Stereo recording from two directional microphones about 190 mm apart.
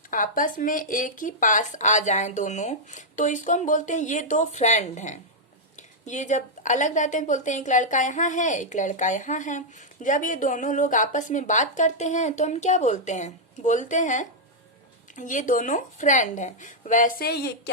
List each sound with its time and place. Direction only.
0.1 s a woman's voice: 45° left (ahead or behind)